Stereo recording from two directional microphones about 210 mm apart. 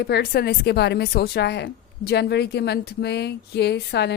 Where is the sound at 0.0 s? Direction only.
50° left (ahead or behind).